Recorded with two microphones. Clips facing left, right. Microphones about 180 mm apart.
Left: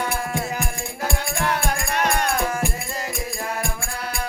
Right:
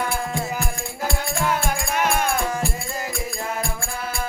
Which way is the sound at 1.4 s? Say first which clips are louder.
Right 1 dB; centre (ahead or behind).